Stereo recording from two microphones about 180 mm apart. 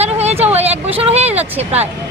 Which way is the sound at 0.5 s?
35° right (ahead or behind).